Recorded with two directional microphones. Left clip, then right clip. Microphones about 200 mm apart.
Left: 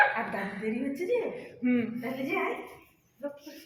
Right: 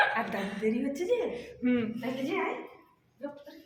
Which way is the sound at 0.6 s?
20° right (ahead or behind).